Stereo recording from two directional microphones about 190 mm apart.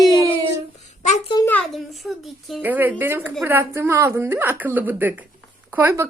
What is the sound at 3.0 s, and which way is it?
A woman's voice, 10° right (ahead or behind).